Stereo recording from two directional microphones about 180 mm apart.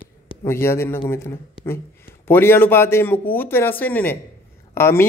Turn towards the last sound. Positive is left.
turn(degrees=15)  # may be behind; listen again after turning